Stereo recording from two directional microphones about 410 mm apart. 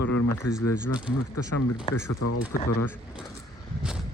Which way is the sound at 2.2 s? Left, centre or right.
Left.